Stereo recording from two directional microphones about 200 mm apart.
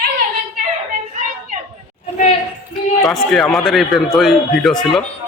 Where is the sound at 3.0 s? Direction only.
Centre (ahead or behind).